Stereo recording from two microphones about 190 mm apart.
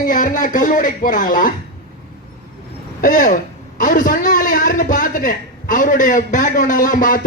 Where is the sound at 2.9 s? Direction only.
45° left (ahead or behind).